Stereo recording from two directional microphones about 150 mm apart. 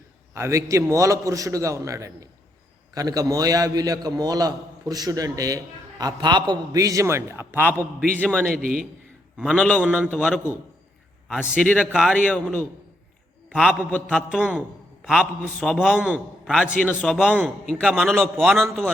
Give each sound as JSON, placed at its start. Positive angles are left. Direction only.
{"t": 0.3, "sound": "a man's voice", "side_deg": -20}
{"t": 8.0, "sound": "a man's voice", "side_deg": 10}
{"t": 11.6, "sound": "a man's voice", "side_deg": 10}
{"t": 11.9, "sound": "a man's voice", "side_deg": -5}
{"t": 12.1, "sound": "a man's voice", "side_deg": 10}
{"t": 13.5, "sound": "a man's voice", "side_deg": -5}
{"t": 13.9, "sound": "a man's voice", "side_deg": 10}
{"t": 14.3, "sound": "a man's voice", "side_deg": -5}
{"t": 16.8, "sound": "a man's voice", "side_deg": 10}
{"t": 17.1, "sound": "a man's voice", "side_deg": -5}
{"t": 18.2, "sound": "a man's voice", "side_deg": 0}